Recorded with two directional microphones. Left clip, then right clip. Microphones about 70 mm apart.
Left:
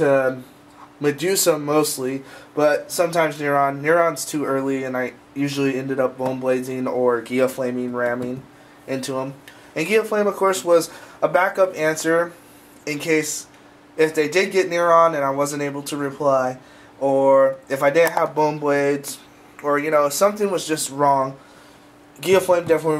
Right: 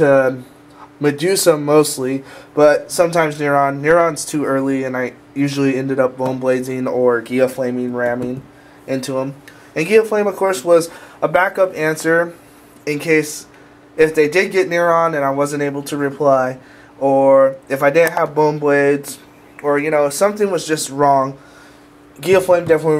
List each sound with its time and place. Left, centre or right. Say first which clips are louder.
0.0 s speech: right 5 dB; centre
17.0 s speech: right 4 dB; centre